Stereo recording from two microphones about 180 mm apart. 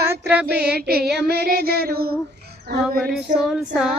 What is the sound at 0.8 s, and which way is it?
Child singing, 60° right (ahead or behind).